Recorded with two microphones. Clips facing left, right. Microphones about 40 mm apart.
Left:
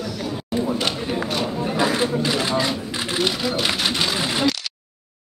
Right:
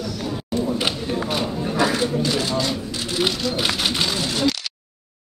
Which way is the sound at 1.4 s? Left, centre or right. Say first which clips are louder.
Even; centre.